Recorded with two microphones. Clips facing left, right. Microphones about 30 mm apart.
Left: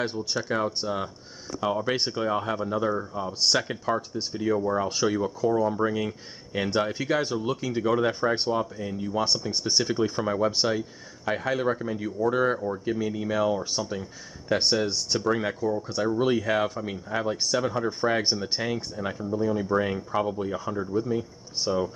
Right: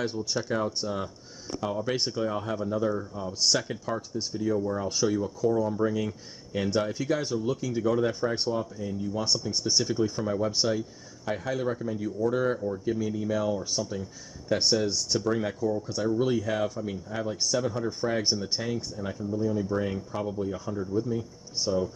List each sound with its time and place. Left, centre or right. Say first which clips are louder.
0.0 s speech: left 1 dB; left